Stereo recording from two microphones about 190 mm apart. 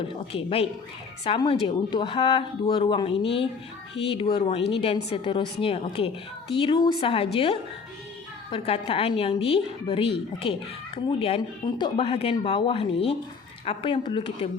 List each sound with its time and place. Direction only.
0.3 s a woman's voice: 30° left (ahead or behind)